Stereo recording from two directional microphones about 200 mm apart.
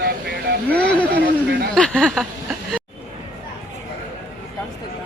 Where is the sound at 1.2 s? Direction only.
60° right (ahead or behind).